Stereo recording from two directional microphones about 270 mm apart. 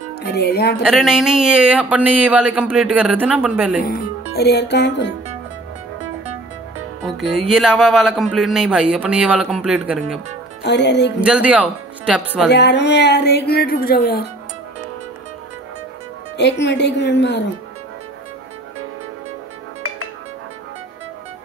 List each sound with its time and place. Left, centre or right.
0.2 s speech: left
0.8 s speech: centre
4.3 s speech: left
7.1 s speech: centre
10.6 s speech: left
11.1 s speech: centre
12.4 s speech: left
16.3 s speech: left